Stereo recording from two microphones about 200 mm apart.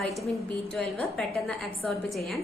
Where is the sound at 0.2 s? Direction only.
Centre (ahead or behind).